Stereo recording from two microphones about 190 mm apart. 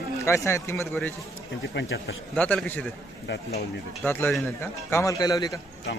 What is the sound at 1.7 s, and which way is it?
Speech, 65° left (ahead or behind).